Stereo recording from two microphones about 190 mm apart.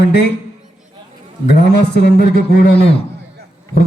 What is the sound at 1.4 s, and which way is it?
Speech, 60° left (ahead or behind).